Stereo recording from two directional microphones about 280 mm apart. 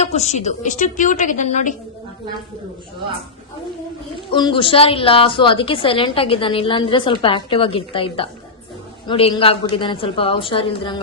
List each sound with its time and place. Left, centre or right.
0.0 s a woman's voice: left
4.3 s a woman's voice: centre